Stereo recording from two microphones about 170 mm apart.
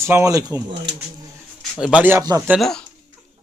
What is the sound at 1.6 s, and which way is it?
Speech, centre (ahead or behind).